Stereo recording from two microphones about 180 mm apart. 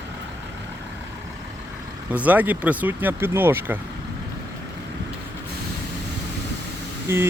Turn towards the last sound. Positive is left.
turn(degrees=-15)  # may be behind; listen again after turning